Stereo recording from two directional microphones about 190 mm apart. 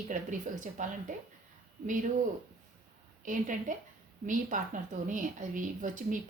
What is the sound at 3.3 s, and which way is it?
A woman's voice, 45° right (ahead or behind).